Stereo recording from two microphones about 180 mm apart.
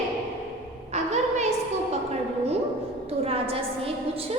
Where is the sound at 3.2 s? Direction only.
30° right (ahead or behind).